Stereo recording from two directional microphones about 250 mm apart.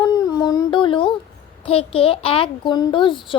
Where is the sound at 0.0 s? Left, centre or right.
Centre.